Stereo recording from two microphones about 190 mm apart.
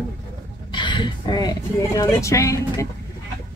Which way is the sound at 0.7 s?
25° left (ahead or behind).